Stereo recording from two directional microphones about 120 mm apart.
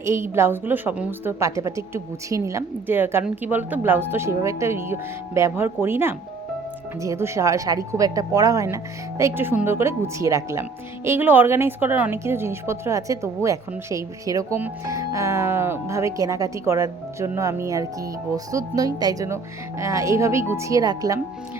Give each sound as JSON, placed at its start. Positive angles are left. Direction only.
{"t": 0.0, "sound": "a woman's voice", "side_deg": -20}